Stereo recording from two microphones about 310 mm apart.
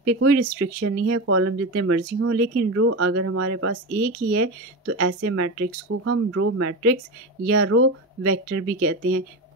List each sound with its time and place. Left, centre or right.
0.0 s speech: right